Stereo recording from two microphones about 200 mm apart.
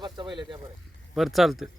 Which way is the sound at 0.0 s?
20° right (ahead or behind).